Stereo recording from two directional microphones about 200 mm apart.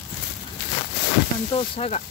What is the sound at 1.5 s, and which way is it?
Speech, 30° left (ahead or behind).